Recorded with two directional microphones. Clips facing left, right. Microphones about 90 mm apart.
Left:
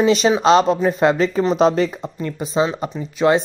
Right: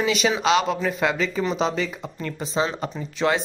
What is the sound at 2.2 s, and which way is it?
Speech, 15° left (ahead or behind).